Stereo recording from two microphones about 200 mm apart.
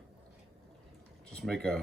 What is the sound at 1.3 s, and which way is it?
Speech, 5° left (ahead or behind).